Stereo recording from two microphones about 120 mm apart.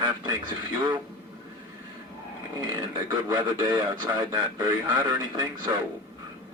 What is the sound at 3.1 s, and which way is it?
Speech, 35° right (ahead or behind).